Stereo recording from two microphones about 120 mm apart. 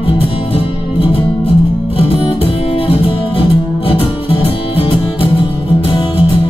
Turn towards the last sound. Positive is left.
turn(degrees=45)  # may be behind; listen again after turning